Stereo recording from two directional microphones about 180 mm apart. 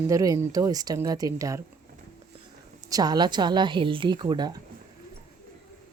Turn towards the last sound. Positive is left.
turn(degrees=-25)  # may be behind; listen again after turning